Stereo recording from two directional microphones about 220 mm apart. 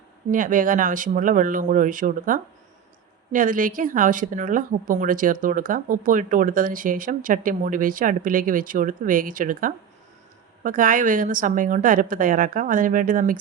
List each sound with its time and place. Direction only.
0.3 s a woman's voice: 40° right (ahead or behind)